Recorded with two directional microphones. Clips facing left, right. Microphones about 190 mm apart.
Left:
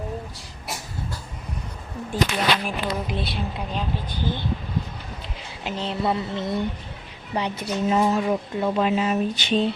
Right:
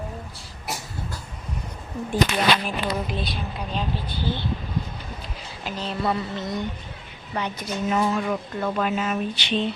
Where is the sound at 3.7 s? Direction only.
15° left (ahead or behind).